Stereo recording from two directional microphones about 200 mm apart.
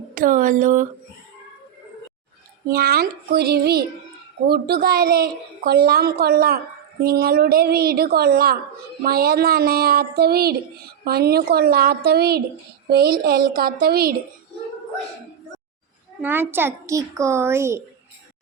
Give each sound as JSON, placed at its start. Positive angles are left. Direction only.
{"t": 0.1, "sound": "speech", "side_deg": -45}
{"t": 2.6, "sound": "a child's voice", "side_deg": -50}
{"t": 16.2, "sound": "a child's voice", "side_deg": -10}